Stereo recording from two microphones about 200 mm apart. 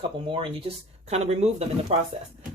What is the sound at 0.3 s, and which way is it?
Speech, 25° right (ahead or behind).